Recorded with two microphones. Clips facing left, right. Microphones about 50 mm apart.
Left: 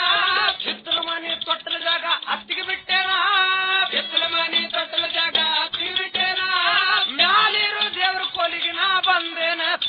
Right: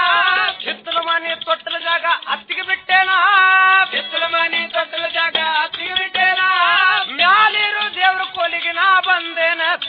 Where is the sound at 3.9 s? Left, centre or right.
Right.